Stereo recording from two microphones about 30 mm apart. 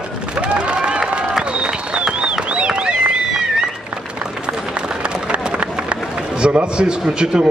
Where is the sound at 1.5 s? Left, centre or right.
Right.